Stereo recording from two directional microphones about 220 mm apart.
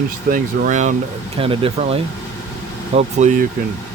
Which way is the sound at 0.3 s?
35° right (ahead or behind).